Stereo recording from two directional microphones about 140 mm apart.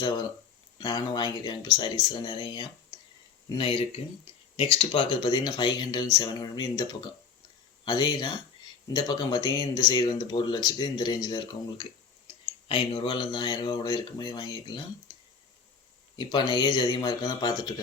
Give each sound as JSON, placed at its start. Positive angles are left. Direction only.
{"t": 0.8, "sound": "speech", "side_deg": 30}
{"t": 7.9, "sound": "speech", "side_deg": 30}
{"t": 16.1, "sound": "speech", "side_deg": 35}